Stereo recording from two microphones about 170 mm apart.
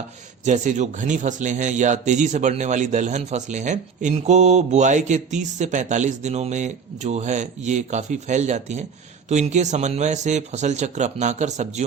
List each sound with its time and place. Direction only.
0.4 s a man's voice: 45° right (ahead or behind)